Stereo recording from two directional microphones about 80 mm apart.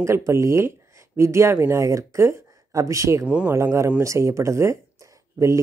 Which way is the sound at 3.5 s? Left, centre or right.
Right.